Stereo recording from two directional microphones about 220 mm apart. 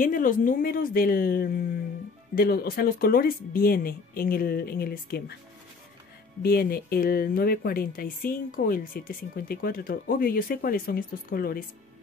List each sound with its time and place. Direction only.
0.0 s speech: 40° left (ahead or behind)
6.4 s speech: 45° left (ahead or behind)